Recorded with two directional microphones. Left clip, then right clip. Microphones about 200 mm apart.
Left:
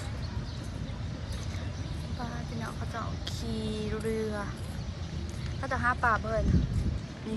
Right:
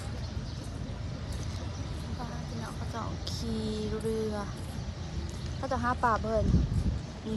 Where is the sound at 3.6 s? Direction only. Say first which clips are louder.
Even; 15° right (ahead or behind).